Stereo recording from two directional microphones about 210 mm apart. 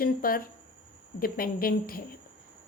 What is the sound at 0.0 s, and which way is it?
A woman's voice, 45° left (ahead or behind).